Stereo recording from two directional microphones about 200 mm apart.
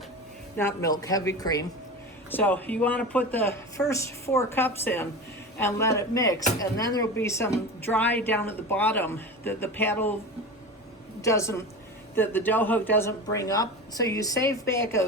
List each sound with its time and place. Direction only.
0.5 s a woman's voice: 15° left (ahead or behind)
11.2 s a woman's voice: 15° left (ahead or behind)